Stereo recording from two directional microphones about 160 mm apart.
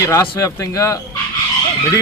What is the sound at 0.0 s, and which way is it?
Speech, 20° left (ahead or behind).